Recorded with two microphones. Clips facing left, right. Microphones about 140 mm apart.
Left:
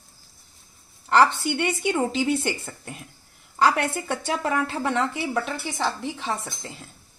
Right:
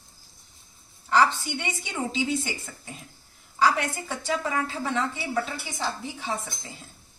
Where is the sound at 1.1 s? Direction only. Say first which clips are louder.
Left 3 dB; 65° left (ahead or behind).